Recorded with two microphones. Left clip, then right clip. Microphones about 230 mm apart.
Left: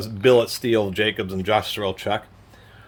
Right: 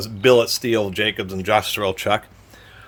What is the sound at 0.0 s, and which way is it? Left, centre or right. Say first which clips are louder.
Speech: right 2 dB; centre.